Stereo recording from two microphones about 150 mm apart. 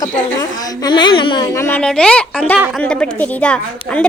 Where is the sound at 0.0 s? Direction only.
25° left (ahead or behind).